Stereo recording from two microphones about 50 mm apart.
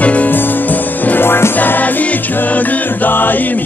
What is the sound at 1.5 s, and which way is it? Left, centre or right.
Music, left.